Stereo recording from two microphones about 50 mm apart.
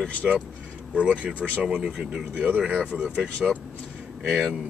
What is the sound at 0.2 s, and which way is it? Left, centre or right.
Speech, centre.